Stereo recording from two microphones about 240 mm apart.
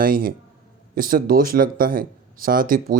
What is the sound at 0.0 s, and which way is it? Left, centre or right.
Speech, right.